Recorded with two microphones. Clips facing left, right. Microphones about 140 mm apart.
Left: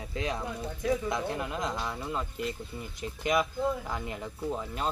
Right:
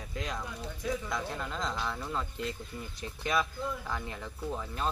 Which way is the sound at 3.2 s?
20° left (ahead or behind).